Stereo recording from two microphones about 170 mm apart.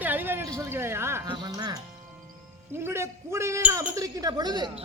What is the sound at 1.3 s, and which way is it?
Music, 25° right (ahead or behind).